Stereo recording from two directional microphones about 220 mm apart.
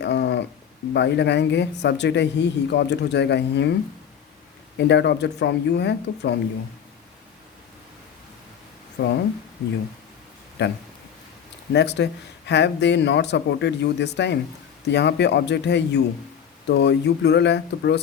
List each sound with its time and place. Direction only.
0.0 s a sound: 50° left (ahead or behind)
0.9 s speech: 50° left (ahead or behind)
4.8 s speech: 50° left (ahead or behind)
9.0 s speech: 50° left (ahead or behind)
10.6 s speech: 50° left (ahead or behind)